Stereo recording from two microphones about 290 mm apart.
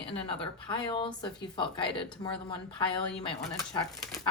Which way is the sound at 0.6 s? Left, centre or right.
Centre.